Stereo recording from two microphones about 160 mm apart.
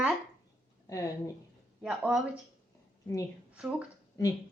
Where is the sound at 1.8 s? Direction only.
5° right (ahead or behind).